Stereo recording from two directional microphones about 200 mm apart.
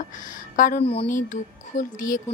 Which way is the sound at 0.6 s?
40° left (ahead or behind).